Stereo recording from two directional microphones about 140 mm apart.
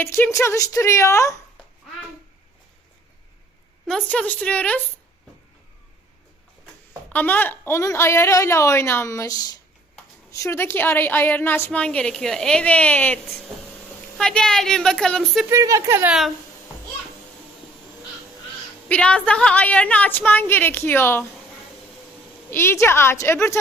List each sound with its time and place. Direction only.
0.0 s a woman's voice: 15° left (ahead or behind)
3.8 s a woman's voice: 5° left (ahead or behind)
7.1 s a woman's voice: 15° left (ahead or behind)
14.2 s speech: 5° left (ahead or behind)
15.4 s speech: 20° right (ahead or behind)
16.0 s speech: centre (ahead or behind)
18.9 s a woman's voice: 10° left (ahead or behind)
22.4 s a woman's voice: 15° left (ahead or behind)